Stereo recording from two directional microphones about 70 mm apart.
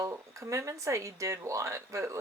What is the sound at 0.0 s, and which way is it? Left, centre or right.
Speech, right.